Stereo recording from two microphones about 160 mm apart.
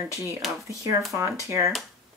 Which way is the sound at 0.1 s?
20° right (ahead or behind).